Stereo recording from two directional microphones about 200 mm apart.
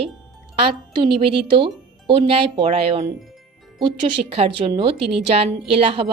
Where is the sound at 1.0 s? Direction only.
25° right (ahead or behind).